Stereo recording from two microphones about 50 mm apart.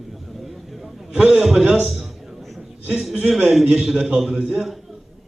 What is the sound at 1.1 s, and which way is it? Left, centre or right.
Speech, centre.